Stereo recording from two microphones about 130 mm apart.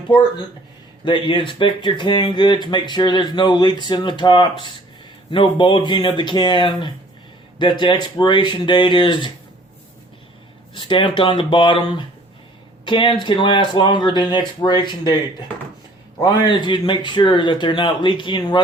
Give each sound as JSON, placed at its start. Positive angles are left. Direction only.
{"t": 1.0, "sound": "speech", "side_deg": 40}
{"t": 10.8, "sound": "speech", "side_deg": 40}
{"t": 16.2, "sound": "speech", "side_deg": 35}